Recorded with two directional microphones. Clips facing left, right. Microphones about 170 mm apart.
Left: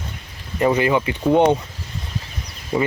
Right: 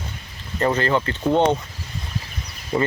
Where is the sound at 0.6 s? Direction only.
10° left (ahead or behind).